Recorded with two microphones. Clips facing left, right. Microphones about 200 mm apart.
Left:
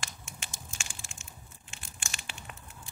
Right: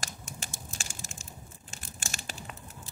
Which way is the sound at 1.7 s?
40° right (ahead or behind).